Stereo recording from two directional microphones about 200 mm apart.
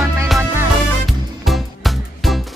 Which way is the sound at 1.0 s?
Centre (ahead or behind).